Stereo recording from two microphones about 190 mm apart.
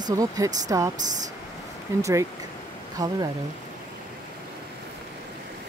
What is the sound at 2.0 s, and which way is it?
Speech, 15° right (ahead or behind).